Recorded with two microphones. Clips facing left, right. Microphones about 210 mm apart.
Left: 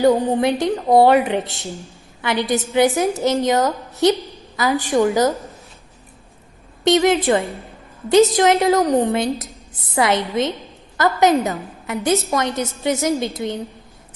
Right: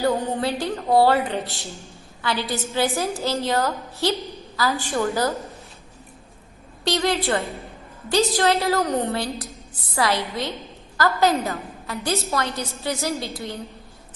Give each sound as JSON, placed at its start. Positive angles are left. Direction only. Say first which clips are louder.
{"t": 0.0, "sound": "a woman's voice", "louder": "left 7 dB", "side_deg": 15}
{"t": 6.8, "sound": "a woman's voice", "louder": "left 7 dB", "side_deg": 20}